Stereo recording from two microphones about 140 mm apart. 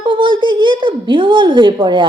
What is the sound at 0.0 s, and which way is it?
A woman's voice, 35° right (ahead or behind).